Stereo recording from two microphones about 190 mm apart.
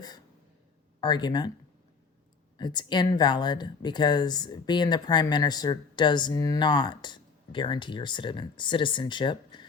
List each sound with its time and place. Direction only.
1.0 s speech: 20° left (ahead or behind)
2.6 s speech: 25° left (ahead or behind)